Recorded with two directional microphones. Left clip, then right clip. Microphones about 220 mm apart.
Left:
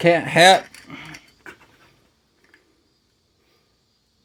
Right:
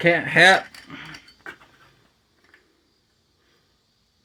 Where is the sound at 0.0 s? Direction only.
20° left (ahead or behind).